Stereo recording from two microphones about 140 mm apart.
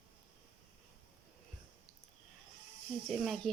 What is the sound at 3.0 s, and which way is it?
Speech, centre (ahead or behind).